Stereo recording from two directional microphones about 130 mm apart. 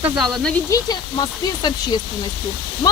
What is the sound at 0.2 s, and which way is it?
Speech, centre (ahead or behind).